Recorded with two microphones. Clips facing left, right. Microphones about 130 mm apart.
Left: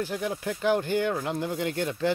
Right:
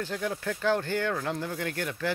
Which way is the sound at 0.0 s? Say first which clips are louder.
Left 2 dB; 15° left (ahead or behind).